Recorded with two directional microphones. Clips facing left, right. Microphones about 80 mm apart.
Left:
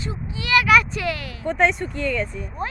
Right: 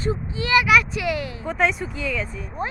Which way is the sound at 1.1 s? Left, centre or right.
Right.